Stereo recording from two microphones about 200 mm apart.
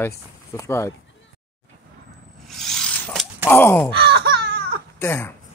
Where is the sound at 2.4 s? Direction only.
Centre (ahead or behind).